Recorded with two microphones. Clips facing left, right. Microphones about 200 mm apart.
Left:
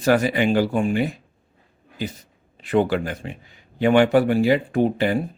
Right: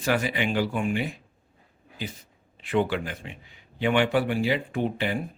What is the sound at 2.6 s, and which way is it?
Speech, 40° left (ahead or behind).